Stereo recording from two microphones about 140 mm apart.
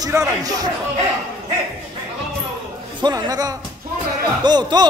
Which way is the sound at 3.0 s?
25° right (ahead or behind).